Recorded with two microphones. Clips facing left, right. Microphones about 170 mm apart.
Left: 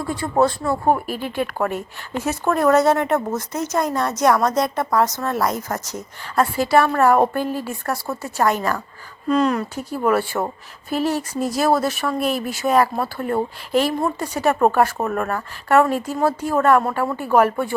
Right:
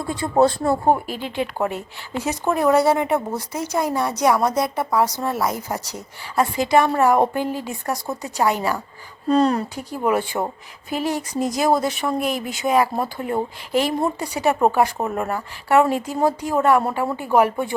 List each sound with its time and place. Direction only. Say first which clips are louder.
0.3 s speech: right 2 dB; 35° right (ahead or behind)
0.9 s a woman's voice: even; 15° right (ahead or behind)
9.3 s speech: right 1 dB; 35° right (ahead or behind)
9.7 s a woman's voice: left 2 dB; 15° right (ahead or behind)